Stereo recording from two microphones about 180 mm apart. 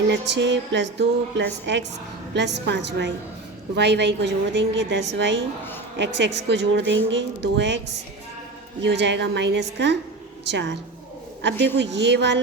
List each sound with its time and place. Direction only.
0.1 s a woman's voice: 75° right (ahead or behind)
8.8 s a woman's voice: 75° right (ahead or behind)